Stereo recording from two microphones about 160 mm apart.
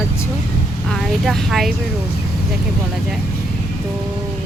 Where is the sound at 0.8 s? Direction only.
Centre (ahead or behind).